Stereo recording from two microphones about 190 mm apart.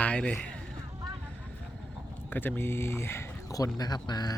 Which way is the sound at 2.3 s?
10° left (ahead or behind).